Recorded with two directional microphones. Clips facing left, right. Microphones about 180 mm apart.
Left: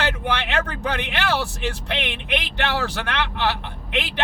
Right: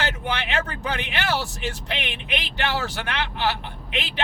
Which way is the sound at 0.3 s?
55° left (ahead or behind).